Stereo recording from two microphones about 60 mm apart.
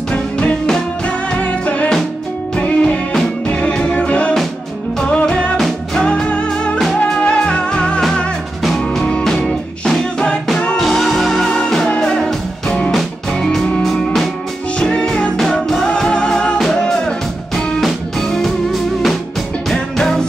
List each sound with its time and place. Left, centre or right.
0.1 s music: centre
13.5 s music: centre